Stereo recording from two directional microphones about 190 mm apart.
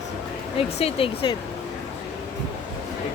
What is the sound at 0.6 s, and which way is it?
Speech, 30° left (ahead or behind).